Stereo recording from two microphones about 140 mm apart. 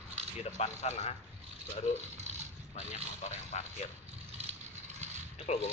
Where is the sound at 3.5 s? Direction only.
55° left (ahead or behind).